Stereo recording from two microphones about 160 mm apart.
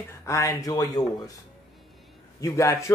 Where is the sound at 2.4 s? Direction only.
20° left (ahead or behind).